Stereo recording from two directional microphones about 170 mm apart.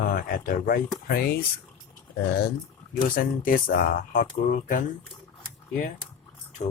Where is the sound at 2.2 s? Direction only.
70° left (ahead or behind); by 4.8 s 50° left (ahead or behind).